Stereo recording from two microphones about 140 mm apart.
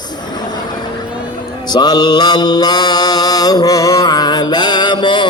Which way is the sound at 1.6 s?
30° left (ahead or behind).